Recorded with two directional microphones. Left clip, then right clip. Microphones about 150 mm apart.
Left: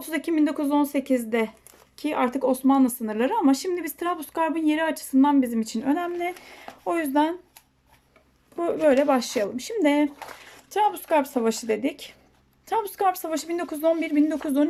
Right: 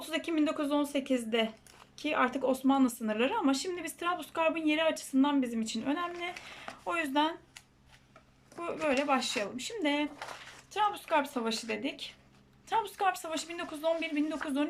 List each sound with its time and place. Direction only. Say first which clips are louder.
0.0 s speech: left 7 dB; 35° left (ahead or behind)
8.5 s speech: left 11 dB; 45° left (ahead or behind)